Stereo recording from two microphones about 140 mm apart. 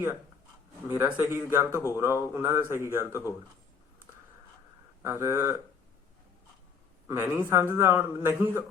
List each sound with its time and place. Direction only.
0.9 s a man's voice: 15° right (ahead or behind)
5.0 s speech: 20° right (ahead or behind)
7.1 s a man's voice: 15° right (ahead or behind)